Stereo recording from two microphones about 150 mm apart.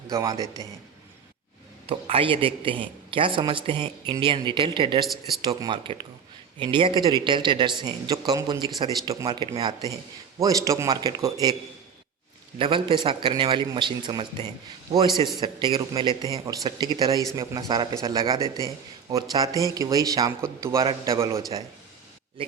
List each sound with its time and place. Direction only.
0.1 s a man's voice: 20° right (ahead or behind)
0.3 s a man's voice: 25° left (ahead or behind)
1.9 s a man's voice: 40° right (ahead or behind)
12.5 s a man's voice: 35° right (ahead or behind)
18.4 s a man's voice: 25° left (ahead or behind)
19.1 s a man's voice: 25° right (ahead or behind)